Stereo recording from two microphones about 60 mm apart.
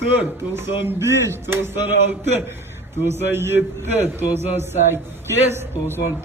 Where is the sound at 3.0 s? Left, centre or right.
Right.